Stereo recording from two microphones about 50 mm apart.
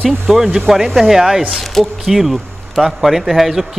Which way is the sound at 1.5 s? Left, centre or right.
Centre.